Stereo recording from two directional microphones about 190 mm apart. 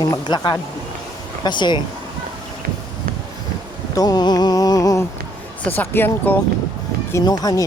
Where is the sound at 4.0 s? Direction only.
20° left (ahead or behind).